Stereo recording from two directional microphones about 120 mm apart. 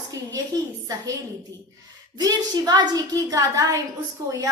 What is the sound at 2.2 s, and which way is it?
A woman's voice, 35° right (ahead or behind).